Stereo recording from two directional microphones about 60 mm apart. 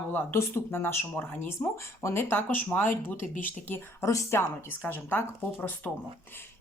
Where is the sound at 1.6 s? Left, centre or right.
Left.